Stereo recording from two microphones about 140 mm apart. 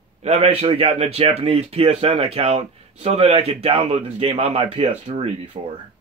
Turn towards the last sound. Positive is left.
turn(degrees=-50)  # may be behind; listen again after turning